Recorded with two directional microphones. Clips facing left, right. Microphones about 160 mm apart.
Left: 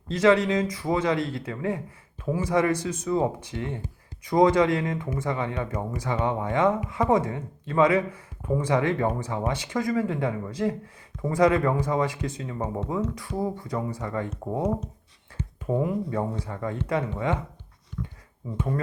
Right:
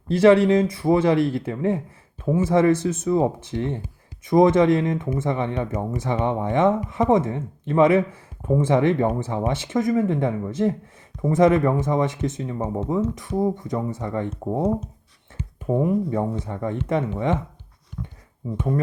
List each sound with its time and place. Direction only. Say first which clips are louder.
0.1 s speech: right 6 dB; 30° right (ahead or behind)
15.8 s speech: right 7 dB; 25° right (ahead or behind)